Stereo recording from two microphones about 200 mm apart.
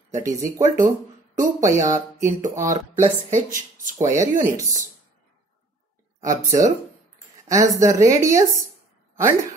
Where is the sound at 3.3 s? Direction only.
40° right (ahead or behind).